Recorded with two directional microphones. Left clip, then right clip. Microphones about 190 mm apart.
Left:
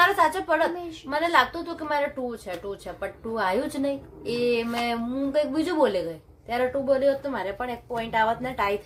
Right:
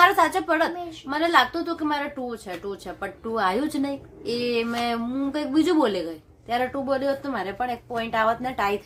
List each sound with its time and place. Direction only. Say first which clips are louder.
0.0 s a woman's voice: right 2 dB; 20° right (ahead or behind)